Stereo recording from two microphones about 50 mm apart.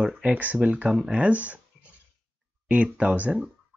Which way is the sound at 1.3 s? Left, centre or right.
Right.